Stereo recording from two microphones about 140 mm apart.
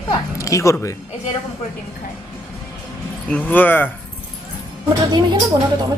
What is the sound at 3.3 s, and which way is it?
Speech, 10° left (ahead or behind).